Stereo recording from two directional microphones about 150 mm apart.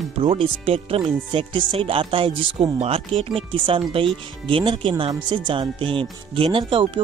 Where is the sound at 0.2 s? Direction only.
40° right (ahead or behind).